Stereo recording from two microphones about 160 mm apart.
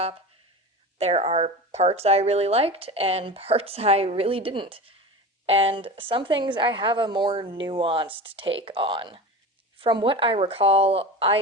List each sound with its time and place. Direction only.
0.9 s speech: 40° right (ahead or behind)